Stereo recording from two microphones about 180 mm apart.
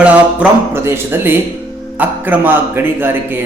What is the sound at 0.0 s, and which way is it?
A man's voice, 5° right (ahead or behind).